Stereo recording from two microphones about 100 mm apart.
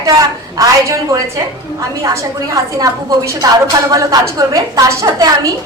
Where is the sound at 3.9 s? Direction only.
35° right (ahead or behind).